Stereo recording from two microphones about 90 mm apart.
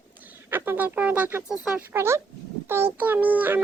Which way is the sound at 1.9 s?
30° right (ahead or behind).